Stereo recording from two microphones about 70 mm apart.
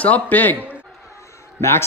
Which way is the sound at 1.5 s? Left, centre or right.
Left.